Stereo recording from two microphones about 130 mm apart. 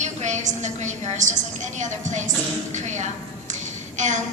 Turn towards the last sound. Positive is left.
turn(degrees=-65)  # may be behind; listen again after turning